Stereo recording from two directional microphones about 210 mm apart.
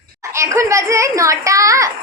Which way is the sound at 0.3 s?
15° right (ahead or behind).